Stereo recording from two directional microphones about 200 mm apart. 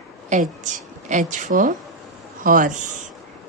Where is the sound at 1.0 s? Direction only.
40° right (ahead or behind).